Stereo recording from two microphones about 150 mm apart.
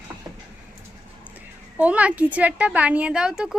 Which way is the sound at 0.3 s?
25° right (ahead or behind).